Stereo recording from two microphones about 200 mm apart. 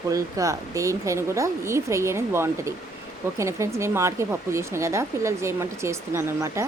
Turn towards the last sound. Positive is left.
turn(degrees=-15)  # may be behind; listen again after turning